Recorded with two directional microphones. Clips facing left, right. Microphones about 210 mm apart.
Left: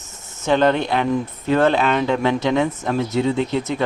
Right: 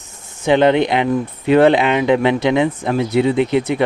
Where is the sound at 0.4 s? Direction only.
15° right (ahead or behind).